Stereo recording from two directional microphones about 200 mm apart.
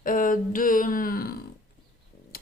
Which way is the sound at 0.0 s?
45° left (ahead or behind).